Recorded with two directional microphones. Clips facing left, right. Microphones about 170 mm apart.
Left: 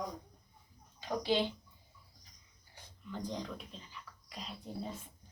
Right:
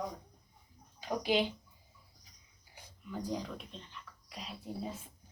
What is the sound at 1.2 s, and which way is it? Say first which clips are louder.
Speech: right 1 dB; 15° right (ahead or behind).